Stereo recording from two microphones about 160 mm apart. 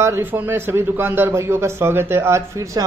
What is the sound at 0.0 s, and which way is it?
A man's voice, 15° right (ahead or behind).